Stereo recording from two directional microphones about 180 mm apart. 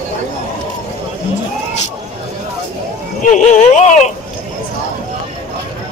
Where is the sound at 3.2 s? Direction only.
45° left (ahead or behind).